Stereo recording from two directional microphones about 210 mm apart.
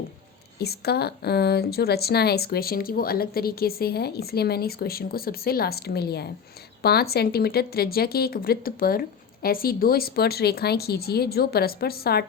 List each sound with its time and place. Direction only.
0.6 s a woman's voice: 50° left (ahead or behind)